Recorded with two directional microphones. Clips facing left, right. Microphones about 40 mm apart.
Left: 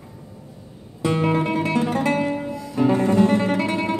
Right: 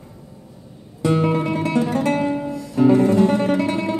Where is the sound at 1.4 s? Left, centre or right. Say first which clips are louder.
Right 1 dB; left.